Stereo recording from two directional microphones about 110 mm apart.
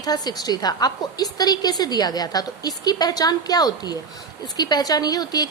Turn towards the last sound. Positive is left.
turn(degrees=35)  # may be behind; listen again after turning